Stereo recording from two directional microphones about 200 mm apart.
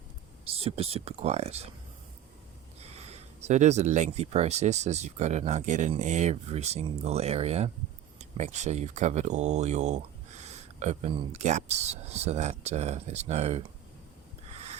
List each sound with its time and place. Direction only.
0.5 s speech: 30° right (ahead or behind)
2.9 s speech: 30° right (ahead or behind)